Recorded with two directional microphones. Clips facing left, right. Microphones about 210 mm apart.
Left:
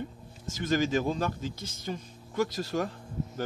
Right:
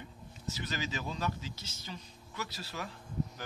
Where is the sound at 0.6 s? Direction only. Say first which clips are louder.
Left 13 dB; 50° left (ahead or behind).